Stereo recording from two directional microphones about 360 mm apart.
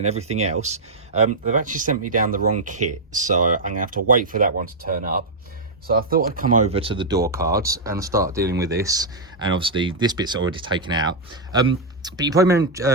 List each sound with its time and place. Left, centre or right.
0.0 s speech: centre
7.3 s speech: right
7.6 s speech: centre